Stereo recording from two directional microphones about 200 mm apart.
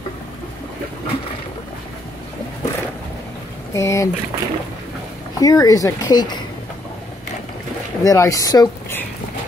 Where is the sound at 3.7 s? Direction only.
15° left (ahead or behind).